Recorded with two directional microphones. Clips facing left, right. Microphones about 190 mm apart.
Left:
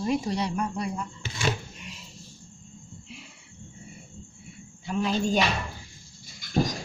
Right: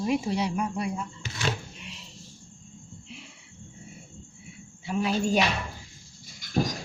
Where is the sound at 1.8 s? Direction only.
Centre (ahead or behind).